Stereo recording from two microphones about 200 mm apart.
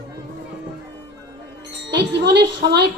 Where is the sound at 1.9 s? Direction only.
60° right (ahead or behind).